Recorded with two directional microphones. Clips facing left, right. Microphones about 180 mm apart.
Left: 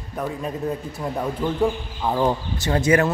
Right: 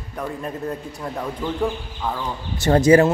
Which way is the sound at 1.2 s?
10° left (ahead or behind).